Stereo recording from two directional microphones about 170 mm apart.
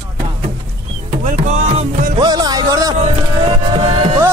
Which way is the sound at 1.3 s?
40° right (ahead or behind).